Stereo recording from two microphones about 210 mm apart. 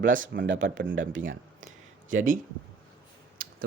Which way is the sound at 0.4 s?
60° right (ahead or behind).